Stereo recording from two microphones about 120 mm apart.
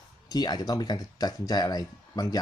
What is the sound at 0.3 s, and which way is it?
Speech, 35° left (ahead or behind).